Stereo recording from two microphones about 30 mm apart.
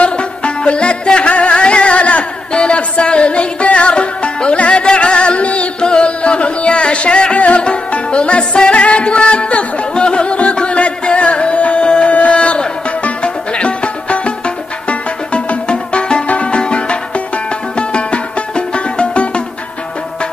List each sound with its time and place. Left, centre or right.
0.0 s music: left
2.5 s music: left
5.8 s music: left
12.1 s music: left